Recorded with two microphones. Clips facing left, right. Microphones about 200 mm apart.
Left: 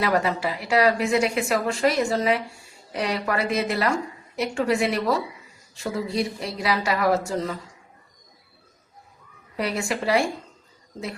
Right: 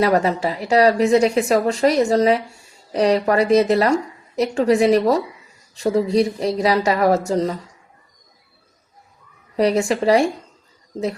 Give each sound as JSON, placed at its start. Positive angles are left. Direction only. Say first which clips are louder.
{"t": 0.0, "sound": "a woman's voice", "louder": "right 6 dB", "side_deg": -40}
{"t": 9.6, "sound": "a woman's voice", "louder": "right 9 dB", "side_deg": -40}